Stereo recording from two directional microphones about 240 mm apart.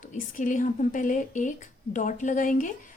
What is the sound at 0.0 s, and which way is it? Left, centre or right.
Speech, left.